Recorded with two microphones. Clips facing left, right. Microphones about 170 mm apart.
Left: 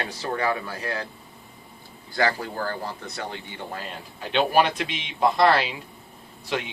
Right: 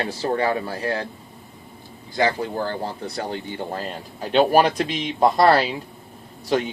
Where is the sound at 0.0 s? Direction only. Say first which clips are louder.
Right 5 dB; 30° right (ahead or behind).